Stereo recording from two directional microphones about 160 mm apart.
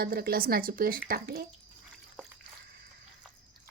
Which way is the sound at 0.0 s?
70° right (ahead or behind).